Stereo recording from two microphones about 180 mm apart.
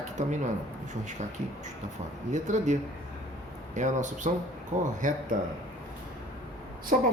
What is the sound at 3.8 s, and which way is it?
A man's voice, 45° right (ahead or behind).